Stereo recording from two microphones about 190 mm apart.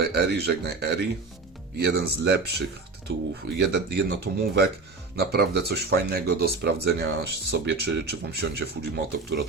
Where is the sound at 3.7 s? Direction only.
60° right (ahead or behind).